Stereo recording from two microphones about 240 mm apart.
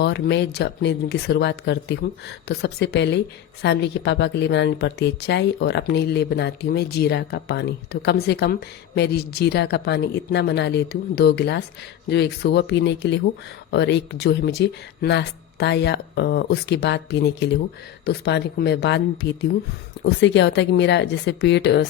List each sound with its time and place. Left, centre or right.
0.0 s speech: left